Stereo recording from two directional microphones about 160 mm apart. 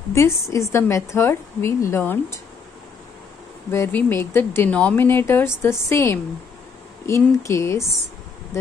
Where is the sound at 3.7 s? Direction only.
15° left (ahead or behind).